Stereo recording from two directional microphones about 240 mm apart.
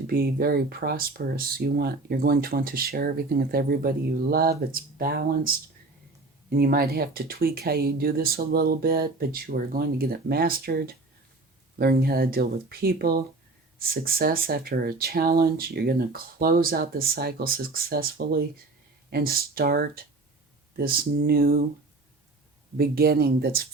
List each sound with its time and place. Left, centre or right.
0.1 s speech: right
6.6 s speech: right
22.8 s speech: right